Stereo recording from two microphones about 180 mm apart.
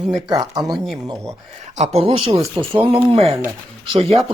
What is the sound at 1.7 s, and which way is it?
Speech, 35° right (ahead or behind).